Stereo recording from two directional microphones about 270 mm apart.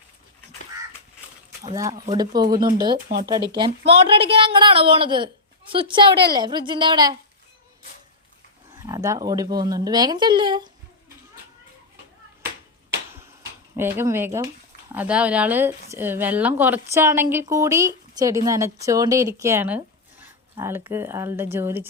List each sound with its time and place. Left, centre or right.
1.6 s a woman's voice: centre
8.8 s speech: centre
13.7 s speech: centre